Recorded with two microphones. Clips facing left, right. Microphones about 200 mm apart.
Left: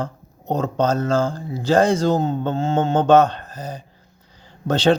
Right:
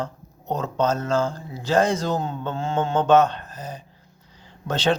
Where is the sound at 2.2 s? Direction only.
40° left (ahead or behind).